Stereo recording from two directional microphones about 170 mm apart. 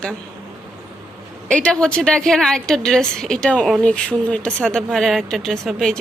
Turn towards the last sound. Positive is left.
turn(degrees=0)  # may be behind; listen again after turning